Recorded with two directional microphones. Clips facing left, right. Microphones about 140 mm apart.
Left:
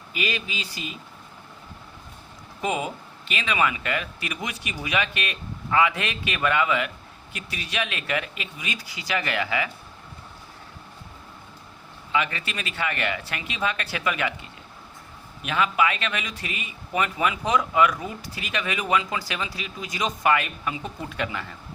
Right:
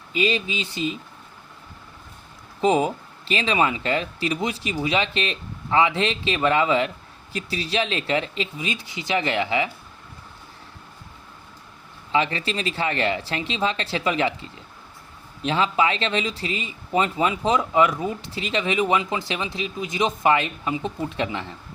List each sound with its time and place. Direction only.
0.1 s speech: 25° right (ahead or behind)
2.6 s speech: 35° right (ahead or behind)
12.1 s speech: 30° right (ahead or behind)